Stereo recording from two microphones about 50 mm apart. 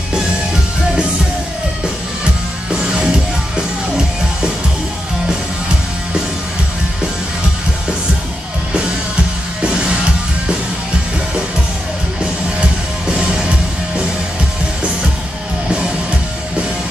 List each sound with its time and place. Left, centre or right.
2.7 s music: centre
9.6 s music: centre
12.2 s music: centre